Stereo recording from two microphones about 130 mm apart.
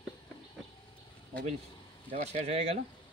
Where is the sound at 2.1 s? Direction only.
60° right (ahead or behind).